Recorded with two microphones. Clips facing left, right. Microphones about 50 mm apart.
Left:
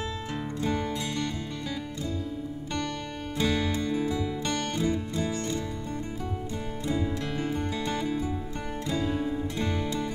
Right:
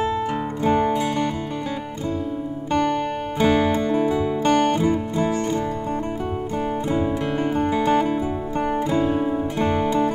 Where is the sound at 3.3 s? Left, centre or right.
Right.